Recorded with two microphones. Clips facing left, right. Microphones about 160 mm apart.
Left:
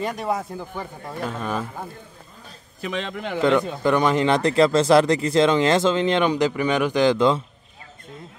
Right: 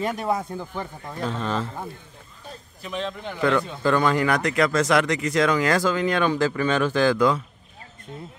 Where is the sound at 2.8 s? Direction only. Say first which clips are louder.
Left 2 dB; 90° left.